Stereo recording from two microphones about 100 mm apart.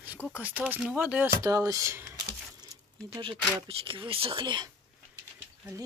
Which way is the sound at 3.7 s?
65° right (ahead or behind).